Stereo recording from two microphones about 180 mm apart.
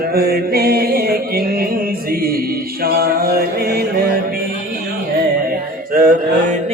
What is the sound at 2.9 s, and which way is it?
Music, 60° right (ahead or behind).